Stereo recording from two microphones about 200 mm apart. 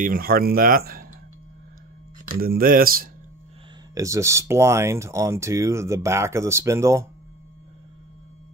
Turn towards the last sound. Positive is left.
turn(degrees=-15)  # may be behind; listen again after turning